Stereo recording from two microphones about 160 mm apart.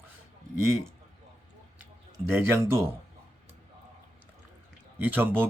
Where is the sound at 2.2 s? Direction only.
15° right (ahead or behind).